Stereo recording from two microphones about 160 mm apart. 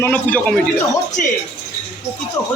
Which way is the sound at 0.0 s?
10° left (ahead or behind).